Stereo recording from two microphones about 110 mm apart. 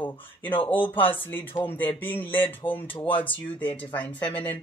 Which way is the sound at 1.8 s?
15° left (ahead or behind).